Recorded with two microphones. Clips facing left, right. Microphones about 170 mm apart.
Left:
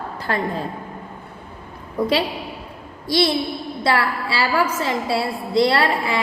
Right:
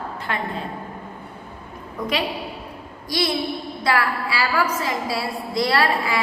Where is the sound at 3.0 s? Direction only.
30° left (ahead or behind).